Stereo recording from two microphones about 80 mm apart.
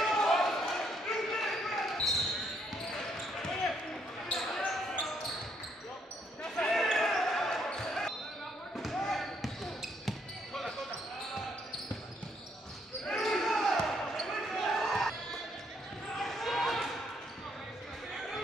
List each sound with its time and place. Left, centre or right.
0.0 s basketball bounce: centre
3.4 s basketball bounce: centre
6.5 s basketball bounce: centre
13.0 s basketball bounce: centre
16.2 s basketball bounce: centre